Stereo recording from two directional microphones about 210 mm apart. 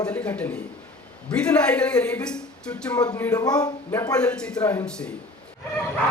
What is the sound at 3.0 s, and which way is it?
A man's voice, 15° left (ahead or behind).